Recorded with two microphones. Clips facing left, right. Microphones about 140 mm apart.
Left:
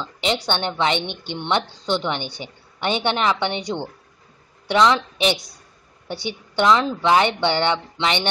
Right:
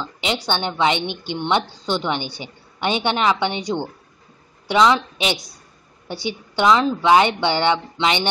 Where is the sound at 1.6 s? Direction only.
20° left (ahead or behind).